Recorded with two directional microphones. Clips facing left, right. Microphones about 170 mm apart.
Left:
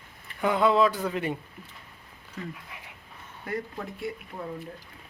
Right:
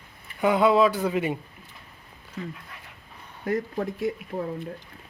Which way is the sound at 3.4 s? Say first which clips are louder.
Right 7 dB; 45° right (ahead or behind).